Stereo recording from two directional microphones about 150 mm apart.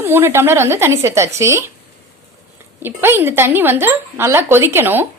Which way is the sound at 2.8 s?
15° right (ahead or behind).